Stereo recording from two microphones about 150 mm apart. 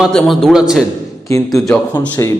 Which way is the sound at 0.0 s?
Centre (ahead or behind).